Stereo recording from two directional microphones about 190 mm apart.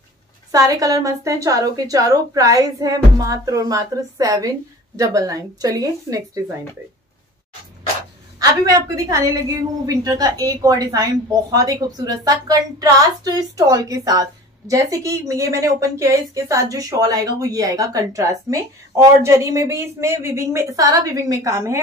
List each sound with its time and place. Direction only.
0.5 s a woman's voice: 20° right (ahead or behind)
8.4 s a woman's voice: 20° right (ahead or behind)